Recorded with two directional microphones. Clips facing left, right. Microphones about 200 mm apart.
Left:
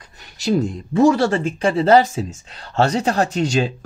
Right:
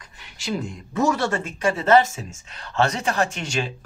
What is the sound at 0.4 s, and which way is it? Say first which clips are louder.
Speech: left 9 dB; 40° left (ahead or behind).